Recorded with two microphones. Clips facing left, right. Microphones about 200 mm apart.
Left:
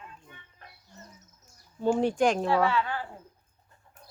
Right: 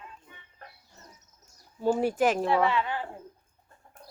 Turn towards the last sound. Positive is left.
turn(degrees=-20)  # may be behind; listen again after turning